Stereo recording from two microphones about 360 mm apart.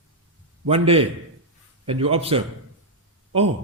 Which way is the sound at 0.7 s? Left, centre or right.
Centre.